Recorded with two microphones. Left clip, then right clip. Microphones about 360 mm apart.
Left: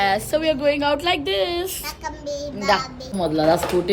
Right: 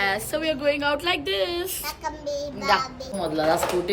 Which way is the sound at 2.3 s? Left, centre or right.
Centre.